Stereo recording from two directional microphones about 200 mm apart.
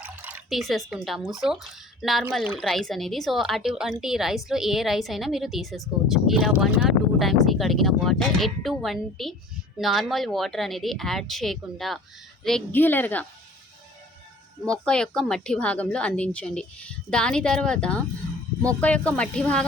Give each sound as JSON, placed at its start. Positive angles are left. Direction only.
{"t": 0.0, "sound": "a woman's voice", "side_deg": -5}
{"t": 14.6, "sound": "speech", "side_deg": 5}